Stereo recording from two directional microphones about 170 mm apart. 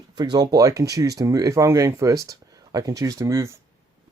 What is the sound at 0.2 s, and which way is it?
Speech, 25° right (ahead or behind).